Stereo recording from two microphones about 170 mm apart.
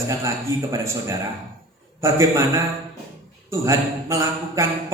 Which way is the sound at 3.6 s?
15° right (ahead or behind).